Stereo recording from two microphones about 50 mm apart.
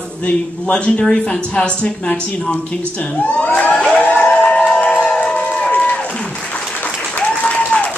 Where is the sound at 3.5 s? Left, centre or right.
Left.